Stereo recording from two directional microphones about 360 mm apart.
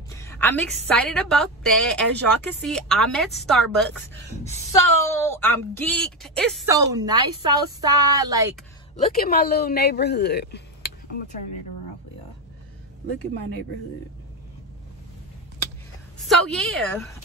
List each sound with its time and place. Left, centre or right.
0.1 s a sound: centre
0.8 s a woman's voice: centre
9.1 s speech: left
16.3 s a woman's voice: centre